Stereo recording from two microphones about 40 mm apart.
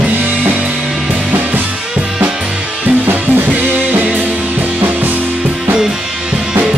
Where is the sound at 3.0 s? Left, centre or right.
Right.